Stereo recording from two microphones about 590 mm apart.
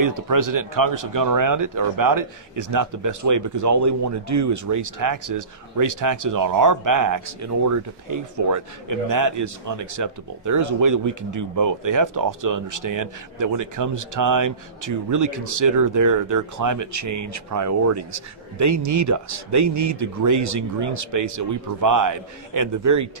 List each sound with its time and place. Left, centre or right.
0.0 s speech: right